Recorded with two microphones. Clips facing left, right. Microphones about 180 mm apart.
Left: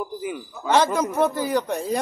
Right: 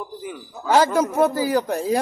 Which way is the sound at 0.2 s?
Centre (ahead or behind).